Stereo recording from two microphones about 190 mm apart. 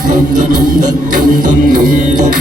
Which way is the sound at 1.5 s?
45° right (ahead or behind).